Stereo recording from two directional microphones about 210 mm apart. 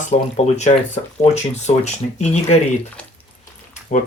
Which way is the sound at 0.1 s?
30° left (ahead or behind).